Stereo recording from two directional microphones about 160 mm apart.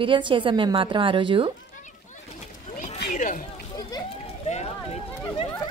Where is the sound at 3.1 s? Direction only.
55° left (ahead or behind).